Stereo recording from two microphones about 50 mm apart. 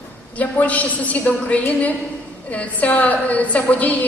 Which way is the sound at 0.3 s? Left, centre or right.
Left.